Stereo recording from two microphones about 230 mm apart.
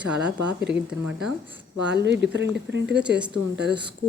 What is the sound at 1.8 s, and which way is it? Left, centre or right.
Speech, right.